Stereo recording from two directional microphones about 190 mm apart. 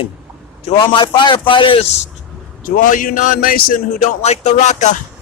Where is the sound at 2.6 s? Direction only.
45° left (ahead or behind).